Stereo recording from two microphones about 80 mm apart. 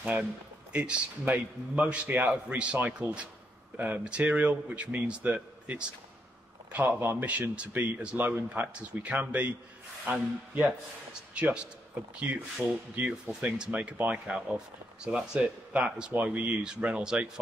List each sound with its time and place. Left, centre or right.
0.7 s speech: centre
11.3 s speech: centre